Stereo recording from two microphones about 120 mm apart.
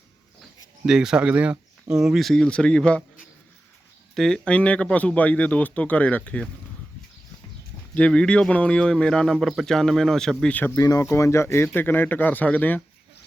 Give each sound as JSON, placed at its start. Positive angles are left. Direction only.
{"t": 0.9, "sound": "speech", "side_deg": -5}
{"t": 4.1, "sound": "speech", "side_deg": 5}
{"t": 7.9, "sound": "speech", "side_deg": 10}
{"t": 10.8, "sound": "speech", "side_deg": 30}